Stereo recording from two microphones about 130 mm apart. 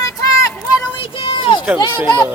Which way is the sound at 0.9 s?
45° left (ahead or behind).